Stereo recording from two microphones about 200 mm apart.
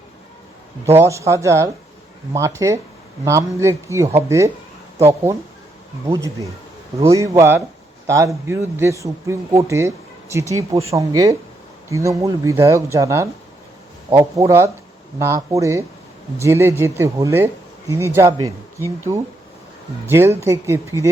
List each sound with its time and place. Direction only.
0.9 s a man's voice: 15° right (ahead or behind)
7.0 s a man's voice: 15° right (ahead or behind)
20.1 s a man's voice: 10° right (ahead or behind)